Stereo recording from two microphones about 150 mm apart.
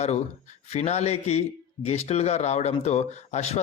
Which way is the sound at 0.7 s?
45° left (ahead or behind).